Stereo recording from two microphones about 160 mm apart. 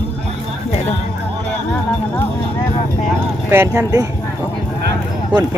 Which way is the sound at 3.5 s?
15° right (ahead or behind).